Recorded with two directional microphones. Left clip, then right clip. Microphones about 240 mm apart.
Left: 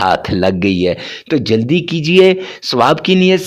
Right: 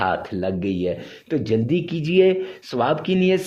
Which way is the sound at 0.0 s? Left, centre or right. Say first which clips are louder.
Left 10 dB; left.